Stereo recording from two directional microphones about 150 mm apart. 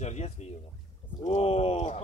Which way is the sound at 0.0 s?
50° left (ahead or behind).